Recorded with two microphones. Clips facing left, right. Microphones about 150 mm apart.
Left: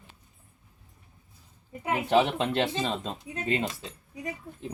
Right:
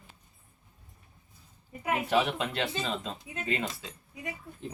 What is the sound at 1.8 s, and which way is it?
Speech, 25° left (ahead or behind).